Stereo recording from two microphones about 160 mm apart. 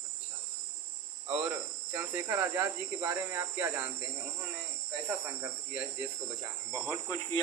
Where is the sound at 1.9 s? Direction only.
10° right (ahead or behind).